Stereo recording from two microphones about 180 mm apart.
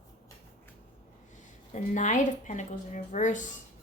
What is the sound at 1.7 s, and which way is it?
Speech, 45° left (ahead or behind).